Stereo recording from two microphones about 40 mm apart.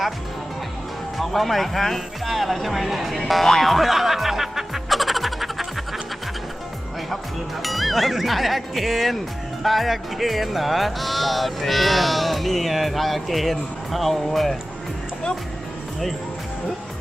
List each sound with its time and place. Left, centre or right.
1.2 s speech: centre
3.2 s music: centre
7.6 s speech: centre